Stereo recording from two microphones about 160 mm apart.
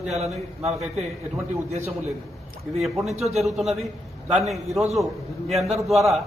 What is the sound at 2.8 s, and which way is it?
A man's voice, centre (ahead or behind).